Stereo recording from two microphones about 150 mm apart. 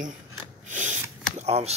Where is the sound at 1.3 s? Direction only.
45° right (ahead or behind).